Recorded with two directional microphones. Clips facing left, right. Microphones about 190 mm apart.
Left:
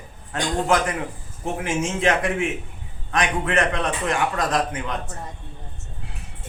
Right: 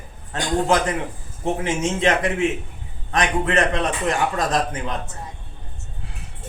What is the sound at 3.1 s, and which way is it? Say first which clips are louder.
A man's voice: right 2 dB; 25° right (ahead or behind).